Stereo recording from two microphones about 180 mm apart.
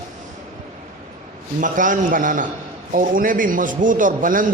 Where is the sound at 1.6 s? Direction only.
45° right (ahead or behind).